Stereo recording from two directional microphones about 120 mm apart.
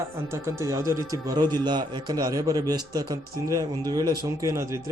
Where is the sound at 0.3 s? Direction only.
25° right (ahead or behind).